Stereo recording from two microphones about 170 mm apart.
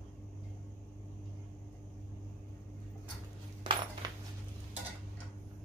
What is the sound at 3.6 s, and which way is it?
Cutlery, 30° right (ahead or behind).